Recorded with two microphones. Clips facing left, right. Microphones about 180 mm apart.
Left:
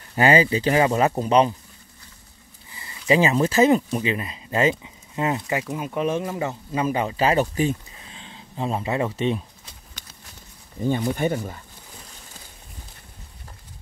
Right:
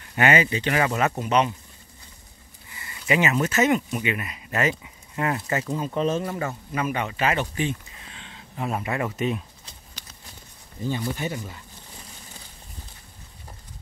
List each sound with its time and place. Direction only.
0.1 s speech: 30° left (ahead or behind)
2.7 s speech: 30° left (ahead or behind)
8.3 s speech: 30° left (ahead or behind)
10.8 s speech: 55° left (ahead or behind)